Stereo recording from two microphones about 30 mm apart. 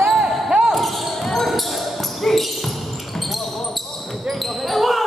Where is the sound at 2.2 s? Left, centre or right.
Centre.